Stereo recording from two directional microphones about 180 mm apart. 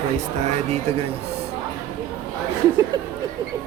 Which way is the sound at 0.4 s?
35° right (ahead or behind).